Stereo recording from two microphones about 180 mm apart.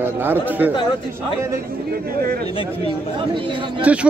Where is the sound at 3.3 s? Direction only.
25° right (ahead or behind).